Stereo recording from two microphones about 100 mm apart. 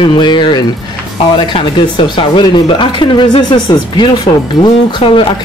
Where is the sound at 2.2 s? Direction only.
55° left (ahead or behind).